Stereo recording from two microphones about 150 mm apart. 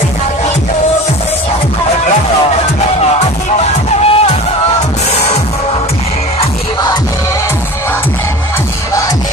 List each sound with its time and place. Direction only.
4.0 s music: 45° left (ahead or behind)